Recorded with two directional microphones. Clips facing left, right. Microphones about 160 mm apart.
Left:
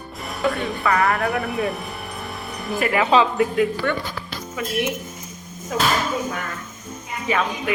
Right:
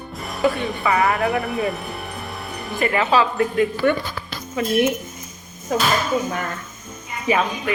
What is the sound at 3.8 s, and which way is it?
Speech, 15° right (ahead or behind).